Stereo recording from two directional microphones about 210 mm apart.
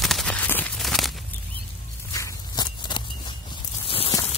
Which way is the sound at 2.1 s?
15° left (ahead or behind).